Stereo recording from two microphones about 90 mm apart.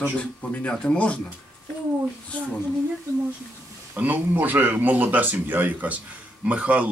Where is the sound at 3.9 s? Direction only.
20° right (ahead or behind).